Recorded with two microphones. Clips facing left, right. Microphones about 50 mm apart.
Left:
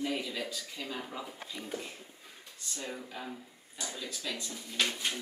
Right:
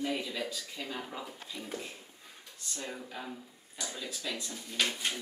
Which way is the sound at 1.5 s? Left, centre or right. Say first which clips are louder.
Even; centre.